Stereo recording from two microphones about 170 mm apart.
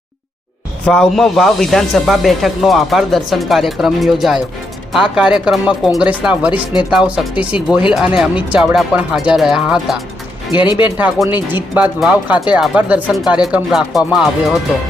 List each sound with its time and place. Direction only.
0.9 s speech: centre (ahead or behind)
10.5 s speech: 25° left (ahead or behind)
10.9 s speech: 10° right (ahead or behind)